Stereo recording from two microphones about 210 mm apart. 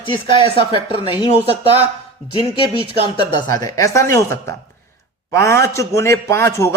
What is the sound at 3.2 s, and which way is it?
A man's voice, 20° left (ahead or behind).